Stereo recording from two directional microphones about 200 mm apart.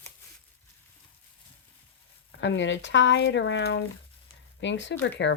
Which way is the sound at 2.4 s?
65° left (ahead or behind).